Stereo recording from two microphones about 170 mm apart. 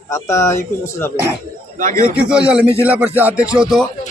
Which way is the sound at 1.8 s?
50° right (ahead or behind).